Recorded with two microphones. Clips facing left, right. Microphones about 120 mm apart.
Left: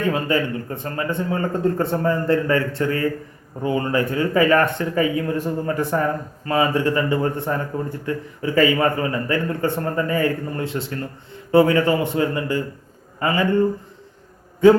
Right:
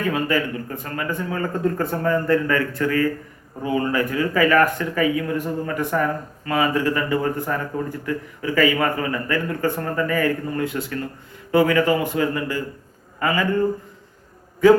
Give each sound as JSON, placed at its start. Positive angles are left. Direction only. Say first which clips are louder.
{"t": 0.1, "sound": "speech", "louder": "left 1 dB", "side_deg": 30}